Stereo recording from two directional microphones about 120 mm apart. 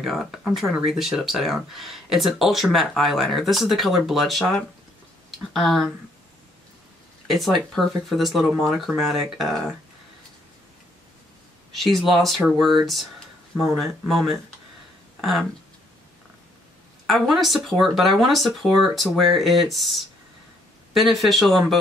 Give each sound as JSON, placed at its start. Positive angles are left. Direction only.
{"t": 0.0, "sound": "speech", "side_deg": 0}
{"t": 7.2, "sound": "speech", "side_deg": 0}
{"t": 11.7, "sound": "speech", "side_deg": 0}
{"t": 17.0, "sound": "speech", "side_deg": 0}